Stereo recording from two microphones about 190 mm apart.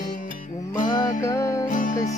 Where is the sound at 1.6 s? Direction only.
45° left (ahead or behind).